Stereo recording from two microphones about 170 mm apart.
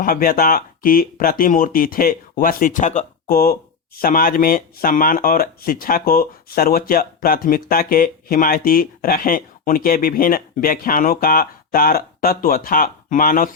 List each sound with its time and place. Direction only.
0.0 s speech: 55° left (ahead or behind)
3.2 s speech: 60° left (ahead or behind)